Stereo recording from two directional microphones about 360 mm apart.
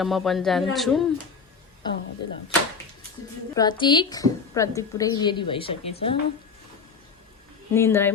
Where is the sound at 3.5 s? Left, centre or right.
Centre.